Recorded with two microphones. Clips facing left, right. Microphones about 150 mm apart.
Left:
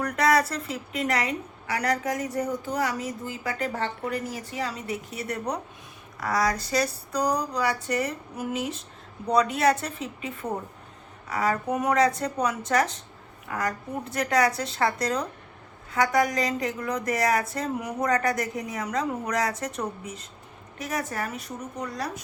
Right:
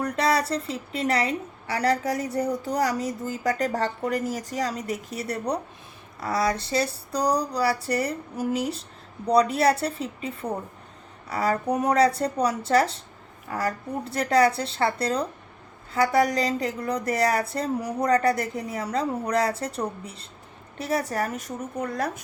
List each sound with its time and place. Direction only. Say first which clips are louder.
0.0 s a woman's voice: left 1 dB; 30° right (ahead or behind); by 22.2 s 50° right (ahead or behind)